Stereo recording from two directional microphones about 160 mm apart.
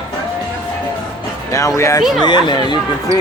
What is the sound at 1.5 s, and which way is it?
Speech, 20° left (ahead or behind).